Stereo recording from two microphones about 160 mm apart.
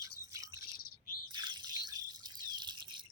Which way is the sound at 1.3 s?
30° right (ahead or behind).